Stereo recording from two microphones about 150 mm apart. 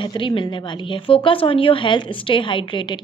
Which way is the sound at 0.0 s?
30° left (ahead or behind).